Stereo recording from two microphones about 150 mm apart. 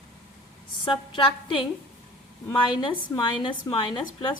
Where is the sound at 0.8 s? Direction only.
35° left (ahead or behind).